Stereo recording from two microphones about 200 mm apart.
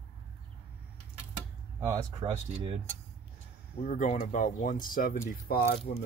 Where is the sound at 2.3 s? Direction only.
30° right (ahead or behind).